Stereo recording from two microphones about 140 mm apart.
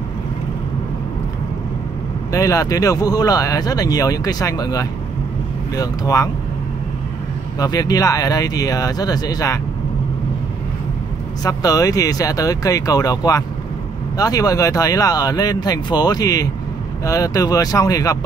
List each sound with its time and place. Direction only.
2.3 s speech: 25° left (ahead or behind)
7.5 s speech: 25° left (ahead or behind)
11.4 s speech: 25° left (ahead or behind)